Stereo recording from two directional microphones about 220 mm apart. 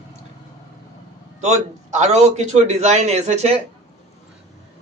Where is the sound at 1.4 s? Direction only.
30° right (ahead or behind).